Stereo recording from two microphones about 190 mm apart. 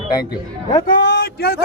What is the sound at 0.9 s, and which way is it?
Speech, 55° left (ahead or behind).